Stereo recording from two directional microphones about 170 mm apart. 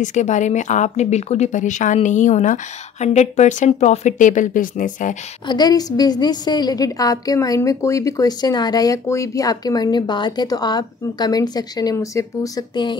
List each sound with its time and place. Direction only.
0.0 s speech: 45° left (ahead or behind)
5.5 s a woman's voice: 25° left (ahead or behind)